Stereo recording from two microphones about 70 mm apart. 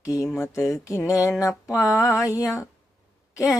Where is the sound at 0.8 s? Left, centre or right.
Left.